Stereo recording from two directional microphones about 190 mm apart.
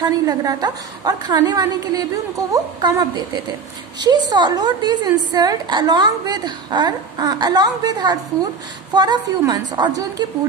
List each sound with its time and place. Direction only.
0.0 s a woman's voice: 20° right (ahead or behind)